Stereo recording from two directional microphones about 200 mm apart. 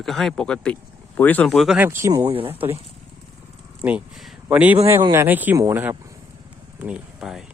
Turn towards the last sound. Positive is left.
turn(degrees=-5)  # may be behind; listen again after turning